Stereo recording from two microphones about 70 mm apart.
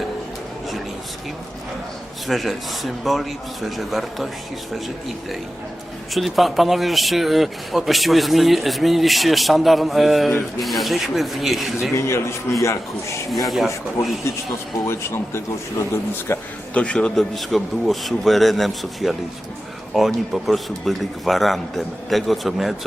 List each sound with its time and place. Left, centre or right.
2.2 s speech: centre
11.9 s a man's voice: left
14.8 s a man's voice: left
16.7 s a man's voice: centre
17.2 s speech: centre